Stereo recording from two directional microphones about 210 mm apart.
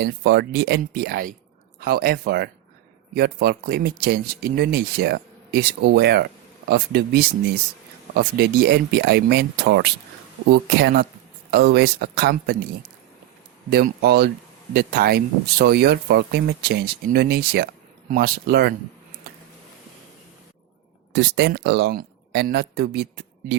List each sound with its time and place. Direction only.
0.0 s speech: 55° right (ahead or behind)
13.7 s speech: 50° right (ahead or behind)
21.1 s speech: 55° right (ahead or behind)